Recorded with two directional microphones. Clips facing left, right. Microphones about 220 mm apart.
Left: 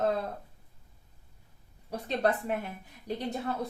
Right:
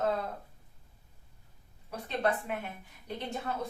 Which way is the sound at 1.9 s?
35° left (ahead or behind).